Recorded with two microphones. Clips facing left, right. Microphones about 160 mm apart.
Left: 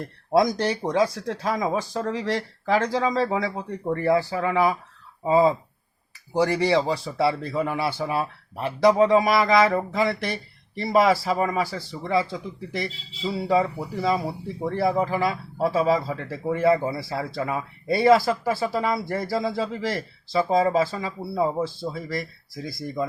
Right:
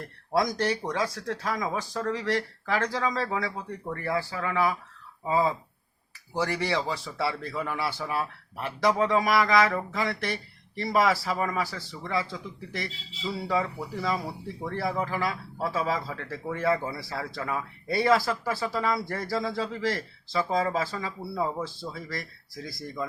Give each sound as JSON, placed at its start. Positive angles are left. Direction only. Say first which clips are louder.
{"t": 0.3, "sound": "speech", "louder": "left 5 dB", "side_deg": 20}
{"t": 6.6, "sound": "speech", "louder": "left 7 dB", "side_deg": 15}